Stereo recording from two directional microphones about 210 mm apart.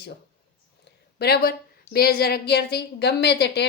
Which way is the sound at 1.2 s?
50° left (ahead or behind).